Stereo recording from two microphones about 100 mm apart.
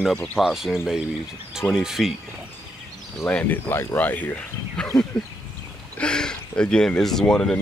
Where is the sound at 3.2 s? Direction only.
20° left (ahead or behind).